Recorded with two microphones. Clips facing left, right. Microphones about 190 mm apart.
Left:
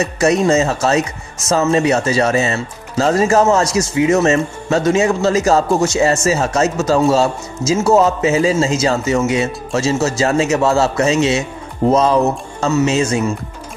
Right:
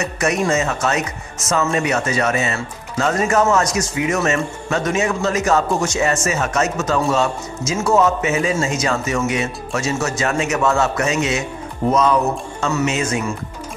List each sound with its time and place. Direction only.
0.0 s speech: 30° left (ahead or behind)
11.9 s music: 30° left (ahead or behind)
12.7 s speech: 30° left (ahead or behind)